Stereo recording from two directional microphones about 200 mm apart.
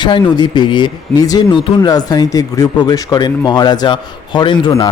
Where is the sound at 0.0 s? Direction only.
20° left (ahead or behind).